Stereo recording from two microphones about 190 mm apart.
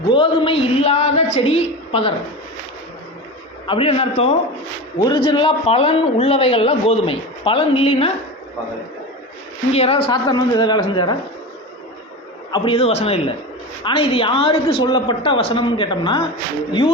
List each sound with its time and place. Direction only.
0.1 s a woman's voice: 25° left (ahead or behind)
3.7 s a woman's voice: 30° left (ahead or behind)
4.9 s a man's voice: 20° left (ahead or behind)
9.7 s a woman's voice: 30° left (ahead or behind)
10.1 s a man's voice: 20° left (ahead or behind)
12.5 s a man's voice: 25° left (ahead or behind)